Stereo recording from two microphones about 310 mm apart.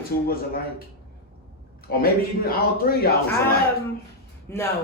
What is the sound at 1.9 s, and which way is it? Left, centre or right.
A man's voice, left.